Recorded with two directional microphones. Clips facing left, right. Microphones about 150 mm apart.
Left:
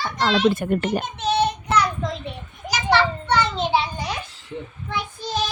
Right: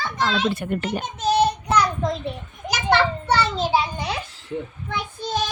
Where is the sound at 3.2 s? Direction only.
35° right (ahead or behind).